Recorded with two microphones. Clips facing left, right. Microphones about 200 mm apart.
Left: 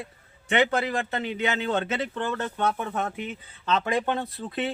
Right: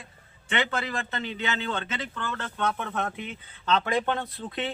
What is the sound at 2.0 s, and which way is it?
Speech, 25° left (ahead or behind).